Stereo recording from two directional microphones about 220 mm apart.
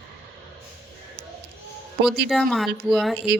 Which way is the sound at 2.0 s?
Centre (ahead or behind).